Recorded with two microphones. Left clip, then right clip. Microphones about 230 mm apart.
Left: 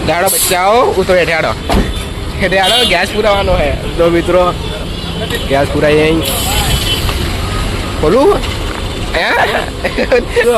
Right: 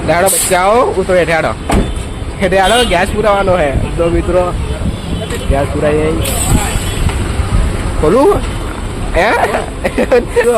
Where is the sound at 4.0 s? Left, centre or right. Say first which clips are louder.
Left 3 dB; centre.